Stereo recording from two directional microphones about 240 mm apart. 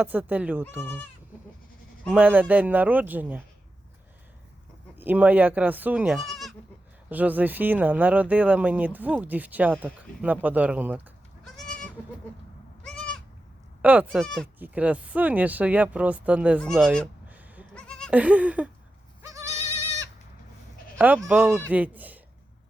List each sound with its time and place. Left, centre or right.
0.0 s speech: centre
0.8 s speech: centre
2.0 s speech: centre
4.9 s speech: centre
12.8 s goat: centre
13.8 s speech: centre
16.6 s bleat: centre
19.2 s goat: centre
21.0 s speech: centre